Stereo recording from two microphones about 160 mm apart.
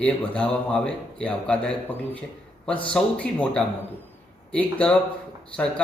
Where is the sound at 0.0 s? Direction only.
5° left (ahead or behind).